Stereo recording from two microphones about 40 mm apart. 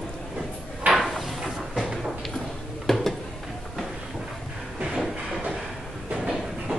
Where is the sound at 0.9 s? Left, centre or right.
Centre.